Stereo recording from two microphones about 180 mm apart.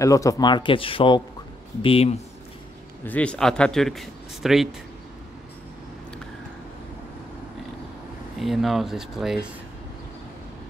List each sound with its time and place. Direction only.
0.0 s speech: 20° left (ahead or behind)
3.1 s speech: 5° left (ahead or behind)
8.4 s speech: centre (ahead or behind)